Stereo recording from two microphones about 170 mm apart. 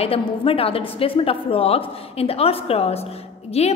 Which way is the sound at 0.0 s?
35° left (ahead or behind).